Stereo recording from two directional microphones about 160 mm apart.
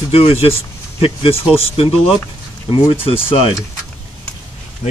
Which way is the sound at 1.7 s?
35° left (ahead or behind).